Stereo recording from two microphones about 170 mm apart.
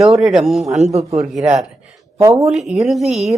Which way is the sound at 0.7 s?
40° right (ahead or behind).